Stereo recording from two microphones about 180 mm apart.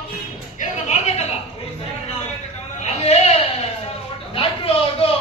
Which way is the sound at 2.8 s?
35° left (ahead or behind).